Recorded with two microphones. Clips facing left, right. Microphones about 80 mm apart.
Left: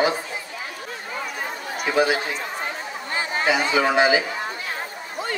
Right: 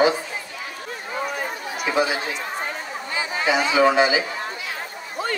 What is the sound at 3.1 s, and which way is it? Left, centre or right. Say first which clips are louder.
Chatter: even; left.